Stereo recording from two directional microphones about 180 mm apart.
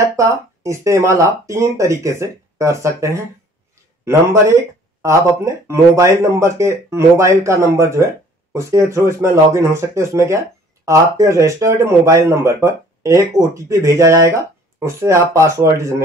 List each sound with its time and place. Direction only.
0.0 s speech: 15° right (ahead or behind)